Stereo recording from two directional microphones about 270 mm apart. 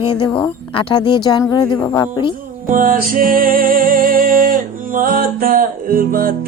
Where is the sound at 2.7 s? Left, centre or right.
Right.